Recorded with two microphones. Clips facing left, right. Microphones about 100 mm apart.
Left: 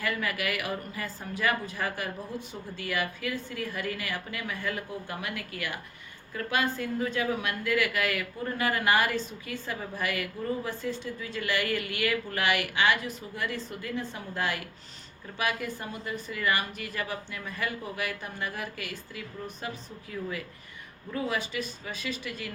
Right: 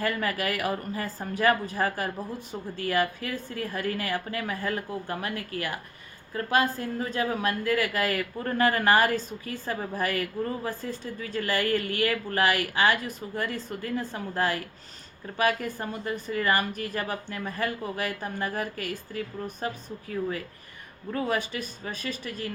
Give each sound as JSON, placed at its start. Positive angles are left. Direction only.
{"t": 0.0, "sound": "a woman's voice", "side_deg": -40}